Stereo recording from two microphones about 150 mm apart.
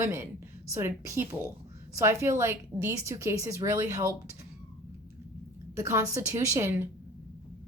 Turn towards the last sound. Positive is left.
turn(degrees=-20)  # may be behind; listen again after turning